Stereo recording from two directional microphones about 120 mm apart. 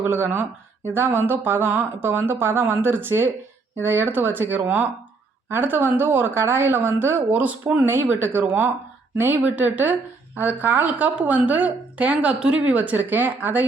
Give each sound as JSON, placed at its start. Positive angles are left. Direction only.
{"t": 0.0, "sound": "speech", "side_deg": -15}